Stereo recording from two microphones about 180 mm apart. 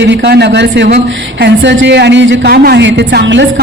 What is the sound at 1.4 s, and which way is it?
Speech, 85° right.